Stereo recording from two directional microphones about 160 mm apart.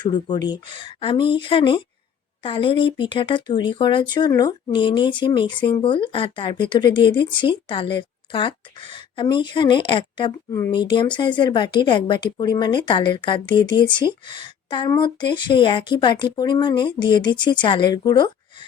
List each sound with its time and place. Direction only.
0.0 s a woman's voice: 25° left (ahead or behind)